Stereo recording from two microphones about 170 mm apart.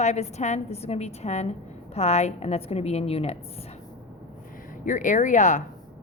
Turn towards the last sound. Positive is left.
turn(degrees=45)  # may be behind; listen again after turning